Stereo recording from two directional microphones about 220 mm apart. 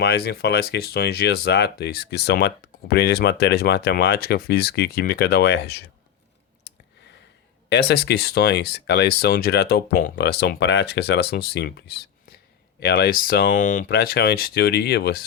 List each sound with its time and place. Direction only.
0.0 s speech: 45° left (ahead or behind)
6.7 s a sound: 55° left (ahead or behind)
7.7 s speech: 50° left (ahead or behind)